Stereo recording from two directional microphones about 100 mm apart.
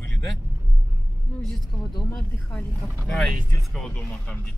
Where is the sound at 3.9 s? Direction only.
15° left (ahead or behind).